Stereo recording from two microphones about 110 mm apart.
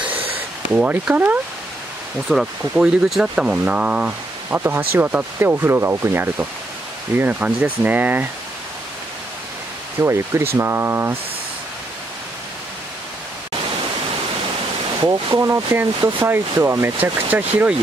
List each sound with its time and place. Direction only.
0.3 s speech: 15° right (ahead or behind)
2.2 s speech: 5° right (ahead or behind)
9.9 s speech: 25° right (ahead or behind)
15.0 s speech: 30° right (ahead or behind)